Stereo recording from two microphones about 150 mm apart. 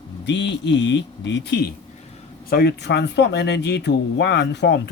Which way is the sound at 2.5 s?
90° left.